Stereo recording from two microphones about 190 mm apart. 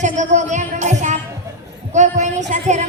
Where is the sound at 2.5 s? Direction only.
40° right (ahead or behind).